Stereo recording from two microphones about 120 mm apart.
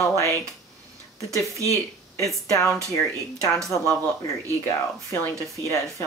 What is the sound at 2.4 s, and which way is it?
Speech, 25° left (ahead or behind).